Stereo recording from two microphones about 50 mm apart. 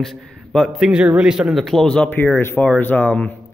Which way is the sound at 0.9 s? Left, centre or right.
Centre.